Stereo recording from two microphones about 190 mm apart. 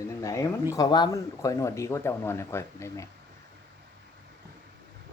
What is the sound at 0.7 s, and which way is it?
Speech, 25° left (ahead or behind).